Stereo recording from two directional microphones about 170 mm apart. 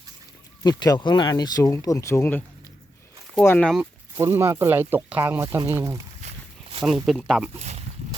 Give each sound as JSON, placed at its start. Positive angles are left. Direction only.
{"t": 0.6, "sound": "speech", "side_deg": 25}
{"t": 4.2, "sound": "speech", "side_deg": -15}
{"t": 6.2, "sound": "walk", "side_deg": -35}
{"t": 6.8, "sound": "speech", "side_deg": 0}
{"t": 7.6, "sound": "a sound", "side_deg": -40}